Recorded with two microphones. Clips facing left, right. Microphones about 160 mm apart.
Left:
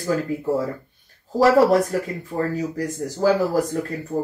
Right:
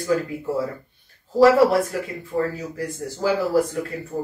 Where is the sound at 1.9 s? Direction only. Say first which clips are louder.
Left 3 dB; 40° left (ahead or behind).